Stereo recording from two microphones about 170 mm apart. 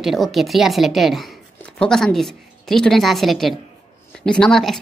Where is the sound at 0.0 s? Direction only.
Centre (ahead or behind).